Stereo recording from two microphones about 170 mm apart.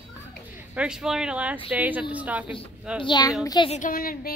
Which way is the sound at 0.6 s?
5° right (ahead or behind).